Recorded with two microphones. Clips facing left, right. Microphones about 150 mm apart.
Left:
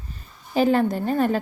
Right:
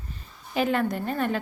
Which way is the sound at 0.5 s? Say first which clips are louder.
Left 5 dB; 35° left (ahead or behind).